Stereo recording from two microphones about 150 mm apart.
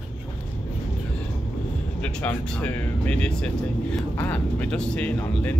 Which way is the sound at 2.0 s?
10° left (ahead or behind).